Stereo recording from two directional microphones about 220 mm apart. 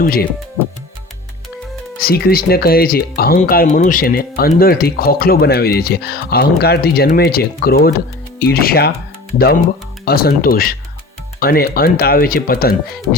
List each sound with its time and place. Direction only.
0.0 s speech: 40° left (ahead or behind)
2.0 s speech: 45° left (ahead or behind)
10.1 s speech: 45° left (ahead or behind)